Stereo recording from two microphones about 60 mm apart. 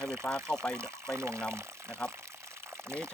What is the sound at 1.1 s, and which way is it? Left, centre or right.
Speech, right.